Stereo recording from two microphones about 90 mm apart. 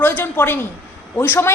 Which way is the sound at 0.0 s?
25° left (ahead or behind).